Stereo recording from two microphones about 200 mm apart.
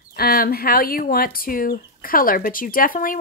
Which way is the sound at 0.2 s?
50° left (ahead or behind).